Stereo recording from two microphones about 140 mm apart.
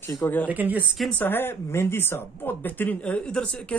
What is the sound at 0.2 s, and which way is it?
Speech, 15° left (ahead or behind).